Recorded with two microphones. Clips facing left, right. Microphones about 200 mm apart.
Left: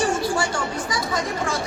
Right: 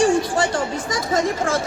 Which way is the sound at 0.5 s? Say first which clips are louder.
Right 3 dB; 45° right (ahead or behind).